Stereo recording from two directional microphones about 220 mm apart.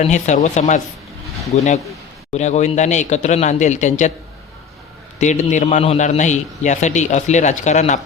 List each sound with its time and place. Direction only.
0.0 s a man's voice: 35° left (ahead or behind)
5.2 s a man's voice: 30° left (ahead or behind)